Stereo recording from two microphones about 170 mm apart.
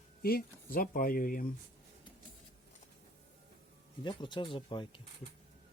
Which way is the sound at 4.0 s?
25° left (ahead or behind).